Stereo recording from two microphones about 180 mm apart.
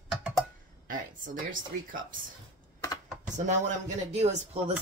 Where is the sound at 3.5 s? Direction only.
40° right (ahead or behind).